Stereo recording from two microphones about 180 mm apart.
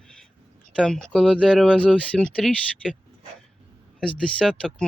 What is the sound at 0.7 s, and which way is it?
Speech, 5° left (ahead or behind).